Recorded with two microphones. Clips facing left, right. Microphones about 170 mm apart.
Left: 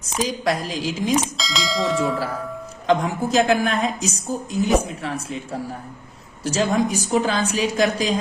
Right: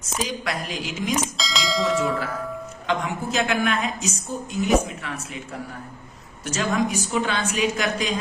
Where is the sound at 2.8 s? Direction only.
35° left (ahead or behind).